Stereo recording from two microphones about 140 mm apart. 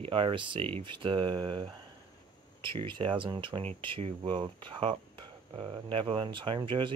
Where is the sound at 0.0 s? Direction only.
40° right (ahead or behind).